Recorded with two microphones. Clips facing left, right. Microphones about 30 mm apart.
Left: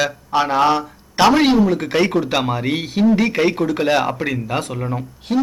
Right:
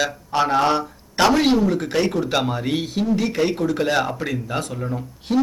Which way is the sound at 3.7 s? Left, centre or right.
Left.